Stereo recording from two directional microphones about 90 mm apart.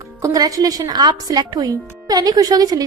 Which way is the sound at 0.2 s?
40° right (ahead or behind).